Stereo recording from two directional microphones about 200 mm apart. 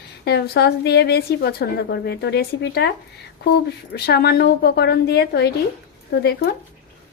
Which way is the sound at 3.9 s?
50° left (ahead or behind).